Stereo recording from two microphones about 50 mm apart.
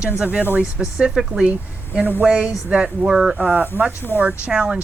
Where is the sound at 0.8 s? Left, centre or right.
Centre.